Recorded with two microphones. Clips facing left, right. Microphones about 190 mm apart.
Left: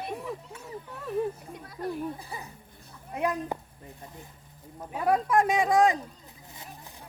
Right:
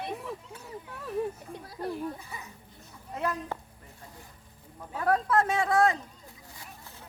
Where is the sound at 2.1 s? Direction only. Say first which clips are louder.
Left 3 dB; 35° left (ahead or behind).